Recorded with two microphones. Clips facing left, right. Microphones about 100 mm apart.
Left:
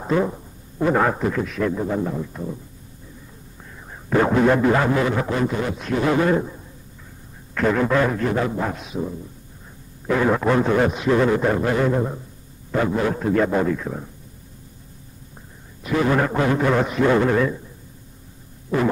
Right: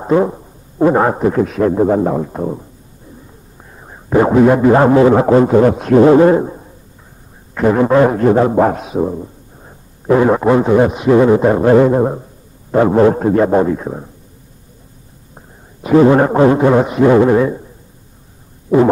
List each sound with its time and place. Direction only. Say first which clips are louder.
0.0 s a man's voice: right 8 dB; 25° right (ahead or behind); by 2.6 s 55° right (ahead or behind)
3.7 s a sound: right 7 dB; 25° right (ahead or behind)
4.6 s a man's voice: right 10 dB; 35° right (ahead or behind)
5.1 s a man's voice: right 13 dB; 50° right (ahead or behind)
6.0 s a man's voice: right 8 dB; 35° right (ahead or behind)
7.5 s a man's voice: right 8 dB; 25° right (ahead or behind)
8.3 s a man's voice: right 12 dB; 50° right (ahead or behind)
10.0 s a man's voice: right 8 dB; 30° right (ahead or behind)
11.9 s a man's voice: right 9 dB; 45° right (ahead or behind); by 14.1 s 25° right (ahead or behind)
15.9 s a man's voice: right 11 dB; 35° right (ahead or behind)